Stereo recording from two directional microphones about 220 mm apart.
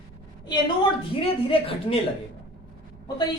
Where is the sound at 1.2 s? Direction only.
25° left (ahead or behind).